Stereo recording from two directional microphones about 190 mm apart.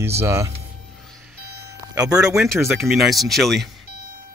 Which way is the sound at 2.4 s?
Centre (ahead or behind).